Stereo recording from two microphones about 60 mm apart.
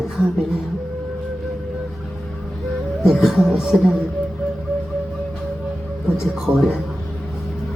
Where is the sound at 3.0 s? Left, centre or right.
Centre.